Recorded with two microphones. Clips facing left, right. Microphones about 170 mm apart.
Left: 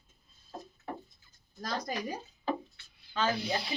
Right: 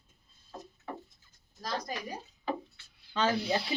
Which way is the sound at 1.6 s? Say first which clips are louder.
Even; 55° left (ahead or behind).